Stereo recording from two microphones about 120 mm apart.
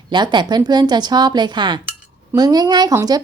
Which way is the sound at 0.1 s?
40° right (ahead or behind).